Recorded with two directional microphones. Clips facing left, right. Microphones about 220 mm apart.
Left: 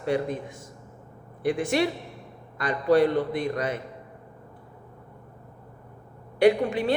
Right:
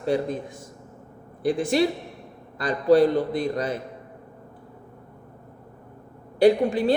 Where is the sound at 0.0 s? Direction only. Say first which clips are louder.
Right 2 dB; 35° right (ahead or behind).